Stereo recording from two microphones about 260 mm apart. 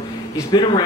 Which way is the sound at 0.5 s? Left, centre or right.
Centre.